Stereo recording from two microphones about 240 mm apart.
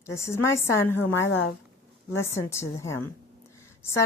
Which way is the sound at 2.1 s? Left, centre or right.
Centre.